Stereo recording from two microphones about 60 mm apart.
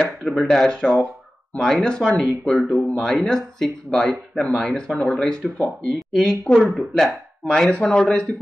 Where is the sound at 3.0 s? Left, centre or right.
Centre.